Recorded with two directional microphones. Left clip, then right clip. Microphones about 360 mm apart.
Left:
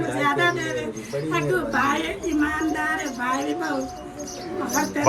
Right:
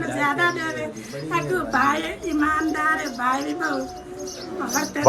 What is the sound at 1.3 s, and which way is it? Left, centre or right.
A woman's voice, centre.